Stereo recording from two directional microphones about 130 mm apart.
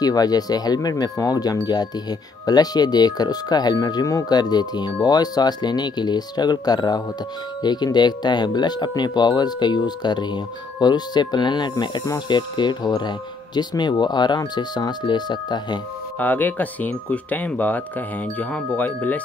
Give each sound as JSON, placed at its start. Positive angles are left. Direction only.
{"t": 0.0, "sound": "speech", "side_deg": 30}
{"t": 16.2, "sound": "speech", "side_deg": 15}